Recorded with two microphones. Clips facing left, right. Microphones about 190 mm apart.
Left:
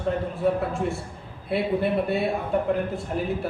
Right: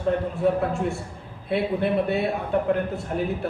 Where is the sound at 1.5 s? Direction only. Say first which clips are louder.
Even; centre (ahead or behind).